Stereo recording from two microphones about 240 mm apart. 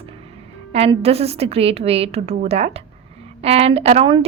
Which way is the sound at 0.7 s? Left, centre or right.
Right.